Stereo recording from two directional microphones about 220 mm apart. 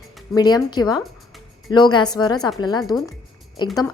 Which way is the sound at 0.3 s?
20° left (ahead or behind).